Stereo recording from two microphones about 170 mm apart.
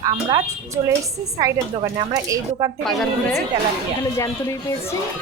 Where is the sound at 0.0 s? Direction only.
25° right (ahead or behind).